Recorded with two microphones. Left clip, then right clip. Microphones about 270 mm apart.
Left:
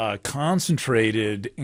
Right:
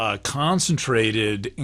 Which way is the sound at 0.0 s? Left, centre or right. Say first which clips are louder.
Right 2 dB; left.